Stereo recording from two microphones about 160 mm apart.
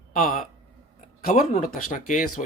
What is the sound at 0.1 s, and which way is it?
Speech, 55° left (ahead or behind).